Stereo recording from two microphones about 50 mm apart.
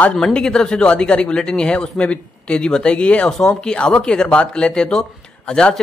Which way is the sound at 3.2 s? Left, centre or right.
Centre.